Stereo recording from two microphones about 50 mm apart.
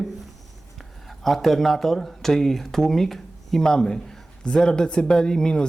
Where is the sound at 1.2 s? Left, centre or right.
Centre.